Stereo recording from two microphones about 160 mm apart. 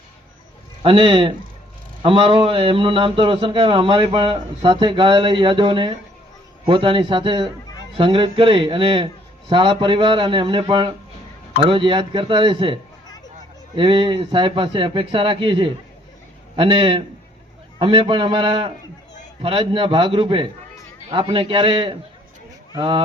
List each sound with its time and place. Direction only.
0.8 s a man's voice: 35° right (ahead or behind)